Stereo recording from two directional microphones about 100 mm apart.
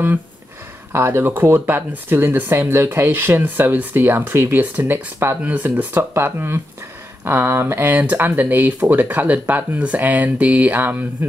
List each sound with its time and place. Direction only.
0.9 s speech: 25° right (ahead or behind)